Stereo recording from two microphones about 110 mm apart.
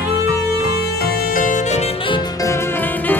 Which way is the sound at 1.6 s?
85° left.